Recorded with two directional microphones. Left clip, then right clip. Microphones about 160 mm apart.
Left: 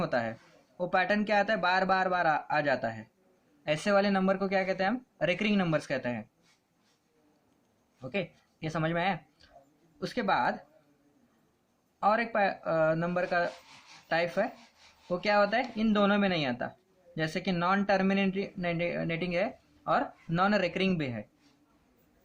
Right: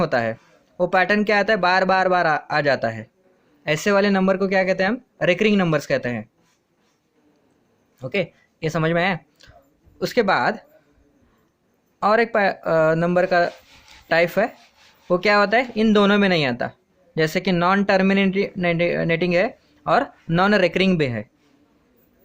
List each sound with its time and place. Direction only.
0.0 s speech: 70° right (ahead or behind)
8.0 s speech: 65° right (ahead or behind)
11.9 s speech: 65° right (ahead or behind)